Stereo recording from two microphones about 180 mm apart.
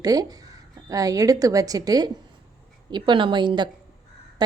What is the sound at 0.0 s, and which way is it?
A woman's voice, 20° right (ahead or behind).